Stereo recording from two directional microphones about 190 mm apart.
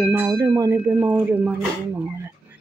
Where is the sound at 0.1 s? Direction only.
15° right (ahead or behind).